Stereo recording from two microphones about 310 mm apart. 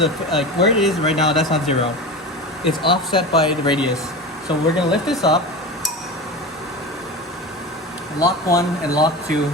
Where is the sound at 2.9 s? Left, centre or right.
Centre.